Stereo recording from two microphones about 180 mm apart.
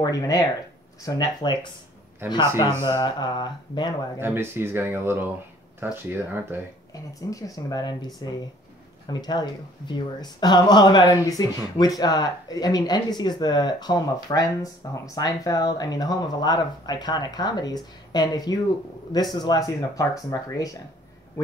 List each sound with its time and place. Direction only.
0.0 s speech: 20° left (ahead or behind)
2.8 s speech: 20° left (ahead or behind)
4.2 s speech: 10° right (ahead or behind)
6.9 s speech: 20° left (ahead or behind)